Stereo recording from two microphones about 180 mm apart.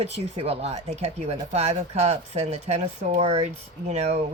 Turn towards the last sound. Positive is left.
turn(degrees=-35)  # may be behind; listen again after turning